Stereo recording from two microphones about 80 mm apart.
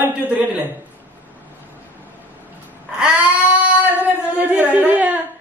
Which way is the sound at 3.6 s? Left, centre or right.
Right.